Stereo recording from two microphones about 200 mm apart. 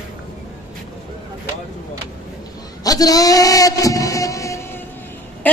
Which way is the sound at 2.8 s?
20° left (ahead or behind).